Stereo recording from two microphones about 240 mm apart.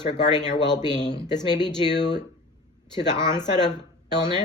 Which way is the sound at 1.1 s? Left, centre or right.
Centre.